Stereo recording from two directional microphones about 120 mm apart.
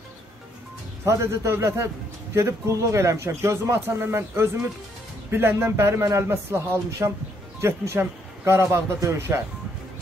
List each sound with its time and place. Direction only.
1.0 s speech: 25° right (ahead or behind)